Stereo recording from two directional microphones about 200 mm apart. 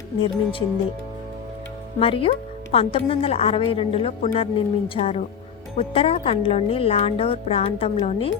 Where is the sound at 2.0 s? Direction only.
25° left (ahead or behind).